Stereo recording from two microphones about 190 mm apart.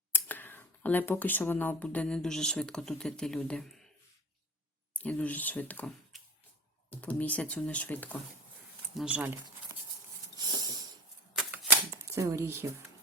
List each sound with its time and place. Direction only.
0.1 s speech: 10° left (ahead or behind)
4.9 s speech: 5° left (ahead or behind)
9.0 s speech: 5° right (ahead or behind)
10.3 s a sound: 20° right (ahead or behind)
11.3 s typewriter: 5° right (ahead or behind)
12.1 s speech: 15° right (ahead or behind)